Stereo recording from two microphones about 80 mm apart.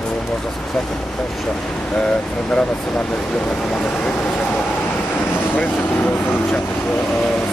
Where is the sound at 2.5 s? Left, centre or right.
Centre.